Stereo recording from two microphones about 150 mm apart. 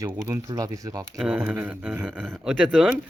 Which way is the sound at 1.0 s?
10° right (ahead or behind).